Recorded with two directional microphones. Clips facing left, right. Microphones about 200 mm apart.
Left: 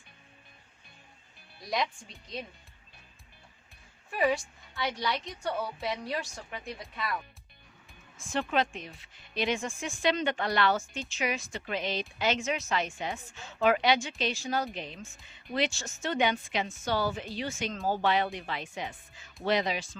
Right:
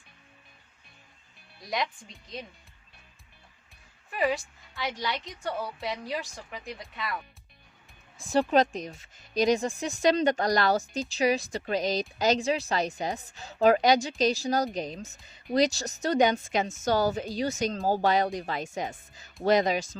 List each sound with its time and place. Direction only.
1.5 s a woman's voice: centre (ahead or behind)
4.1 s a woman's voice: centre (ahead or behind)
8.2 s speech: 35° right (ahead or behind)